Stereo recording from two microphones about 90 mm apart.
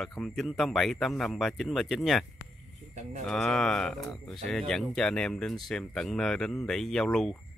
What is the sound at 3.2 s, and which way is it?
Speech, 5° left (ahead or behind).